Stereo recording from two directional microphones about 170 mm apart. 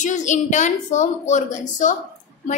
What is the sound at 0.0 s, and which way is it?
A woman's voice, 45° left (ahead or behind).